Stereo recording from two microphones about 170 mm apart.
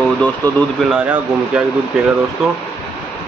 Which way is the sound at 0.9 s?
5° right (ahead or behind).